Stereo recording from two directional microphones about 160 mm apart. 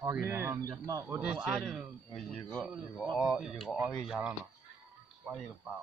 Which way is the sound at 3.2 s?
5° right (ahead or behind).